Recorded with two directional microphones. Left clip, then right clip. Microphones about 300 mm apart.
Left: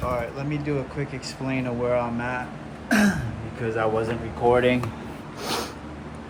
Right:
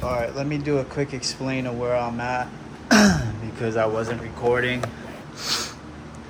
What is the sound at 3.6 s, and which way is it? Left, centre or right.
Speech, centre.